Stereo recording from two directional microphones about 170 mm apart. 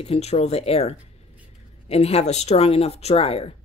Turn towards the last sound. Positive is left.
turn(degrees=35)  # may be behind; listen again after turning